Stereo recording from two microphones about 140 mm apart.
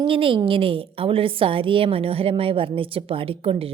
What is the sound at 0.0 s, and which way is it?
A woman's voice, 40° right (ahead or behind).